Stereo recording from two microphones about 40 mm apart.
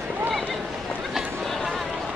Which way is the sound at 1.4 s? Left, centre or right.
Centre.